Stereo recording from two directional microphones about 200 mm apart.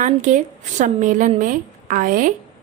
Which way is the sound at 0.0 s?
40° right (ahead or behind).